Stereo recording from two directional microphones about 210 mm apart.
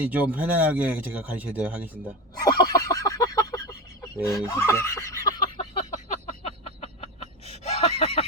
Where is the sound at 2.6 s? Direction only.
15° left (ahead or behind).